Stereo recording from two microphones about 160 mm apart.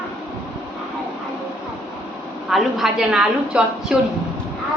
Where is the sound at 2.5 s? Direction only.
Centre (ahead or behind).